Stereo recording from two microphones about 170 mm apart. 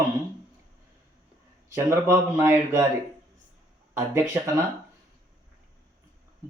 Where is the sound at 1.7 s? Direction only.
20° right (ahead or behind).